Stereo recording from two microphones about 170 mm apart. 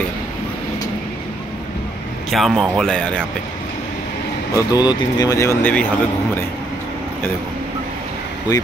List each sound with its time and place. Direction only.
2.3 s speech: centre (ahead or behind)
4.6 s speech: 25° left (ahead or behind)